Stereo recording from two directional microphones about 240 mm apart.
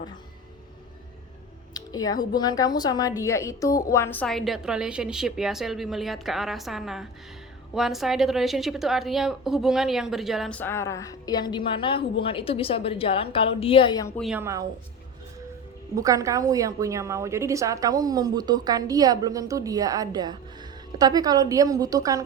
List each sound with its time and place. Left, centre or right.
1.7 s a woman's voice: centre
14.2 s a woman's voice: centre
16.0 s a woman's voice: centre